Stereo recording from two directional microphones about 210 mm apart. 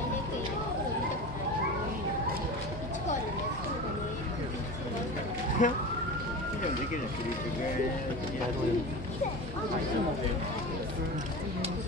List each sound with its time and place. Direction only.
5.6 s speech: 40° left (ahead or behind)